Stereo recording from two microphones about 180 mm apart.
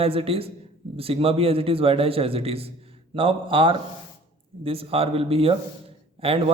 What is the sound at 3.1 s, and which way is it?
Speech, 30° right (ahead or behind).